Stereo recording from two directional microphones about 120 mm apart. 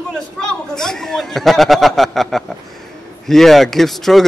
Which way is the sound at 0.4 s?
5° left (ahead or behind).